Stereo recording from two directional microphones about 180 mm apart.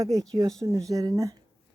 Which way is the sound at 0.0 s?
20° right (ahead or behind).